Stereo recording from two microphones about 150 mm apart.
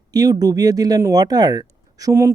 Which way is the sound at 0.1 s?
25° right (ahead or behind).